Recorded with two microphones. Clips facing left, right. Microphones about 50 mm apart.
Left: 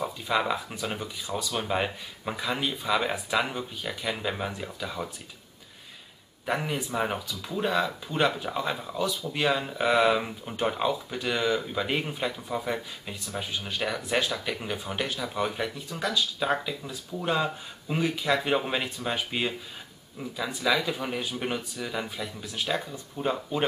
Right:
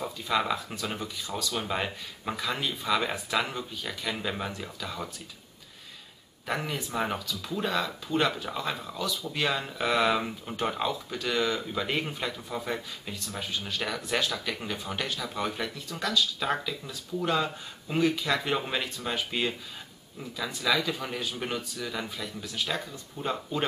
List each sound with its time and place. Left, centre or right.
0.0 s speech: centre
6.4 s speech: centre